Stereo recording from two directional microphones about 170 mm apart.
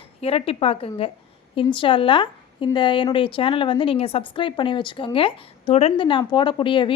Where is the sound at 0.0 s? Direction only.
35° left (ahead or behind).